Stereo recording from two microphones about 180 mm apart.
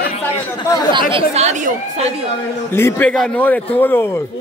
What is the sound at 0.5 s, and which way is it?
Chatter, 20° left (ahead or behind).